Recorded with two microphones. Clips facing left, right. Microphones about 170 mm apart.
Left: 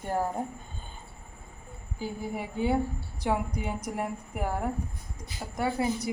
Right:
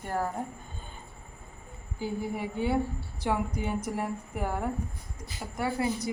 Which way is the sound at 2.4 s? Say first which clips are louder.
Left 2 dB; 20° left (ahead or behind).